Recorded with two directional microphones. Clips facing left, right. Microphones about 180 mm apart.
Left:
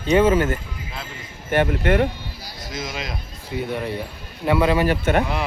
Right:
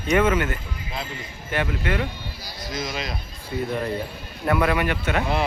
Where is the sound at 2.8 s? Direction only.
20° left (ahead or behind).